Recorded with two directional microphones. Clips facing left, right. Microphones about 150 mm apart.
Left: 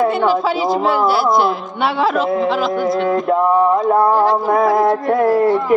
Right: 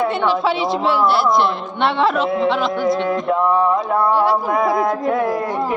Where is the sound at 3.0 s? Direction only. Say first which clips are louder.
Left 3 dB; 40° left (ahead or behind).